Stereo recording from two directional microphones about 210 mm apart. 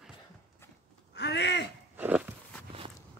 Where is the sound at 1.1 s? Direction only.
55° left (ahead or behind).